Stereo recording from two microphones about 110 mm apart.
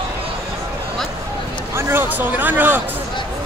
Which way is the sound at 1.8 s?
20° right (ahead or behind).